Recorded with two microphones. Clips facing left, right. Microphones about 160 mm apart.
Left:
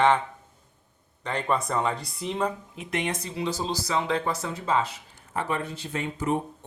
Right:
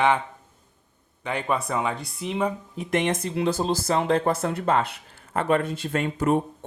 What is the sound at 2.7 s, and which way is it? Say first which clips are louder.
Speech: right 6 dB; 50° right (ahead or behind).